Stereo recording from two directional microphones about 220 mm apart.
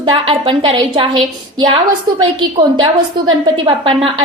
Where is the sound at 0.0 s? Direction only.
25° right (ahead or behind).